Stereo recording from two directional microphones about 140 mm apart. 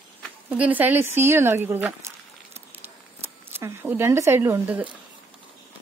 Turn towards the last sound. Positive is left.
turn(degrees=-15)  # may be behind; listen again after turning